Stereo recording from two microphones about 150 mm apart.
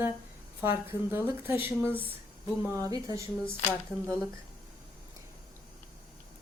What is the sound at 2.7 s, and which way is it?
Speech, 20° right (ahead or behind).